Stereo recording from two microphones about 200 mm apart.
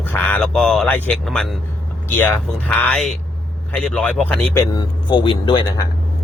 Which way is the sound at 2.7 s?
5° left (ahead or behind).